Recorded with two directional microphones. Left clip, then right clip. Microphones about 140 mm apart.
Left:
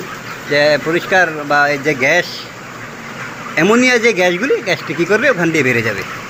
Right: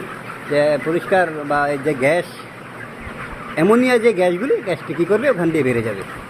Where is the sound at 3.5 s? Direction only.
15° right (ahead or behind).